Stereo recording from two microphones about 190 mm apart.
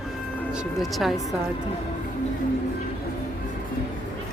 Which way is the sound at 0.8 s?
Centre (ahead or behind).